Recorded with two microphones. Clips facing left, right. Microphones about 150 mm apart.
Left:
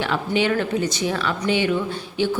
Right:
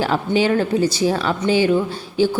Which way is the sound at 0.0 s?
35° right (ahead or behind).